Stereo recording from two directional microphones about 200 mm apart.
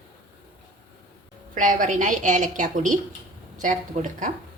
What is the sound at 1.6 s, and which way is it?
A woman's voice, 40° right (ahead or behind).